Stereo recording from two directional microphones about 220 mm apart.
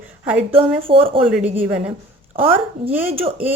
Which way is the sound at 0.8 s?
25° right (ahead or behind).